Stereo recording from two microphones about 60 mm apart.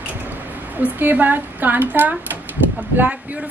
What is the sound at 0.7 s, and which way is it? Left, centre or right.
A woman's voice, right.